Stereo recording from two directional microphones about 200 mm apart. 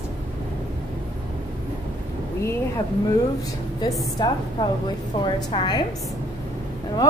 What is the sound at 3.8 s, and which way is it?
Speech, 20° left (ahead or behind).